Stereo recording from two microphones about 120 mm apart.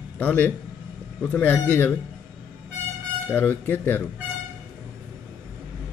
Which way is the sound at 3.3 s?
15° left (ahead or behind).